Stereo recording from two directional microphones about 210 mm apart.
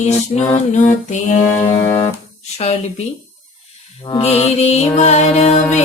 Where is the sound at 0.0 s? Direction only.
35° left (ahead or behind).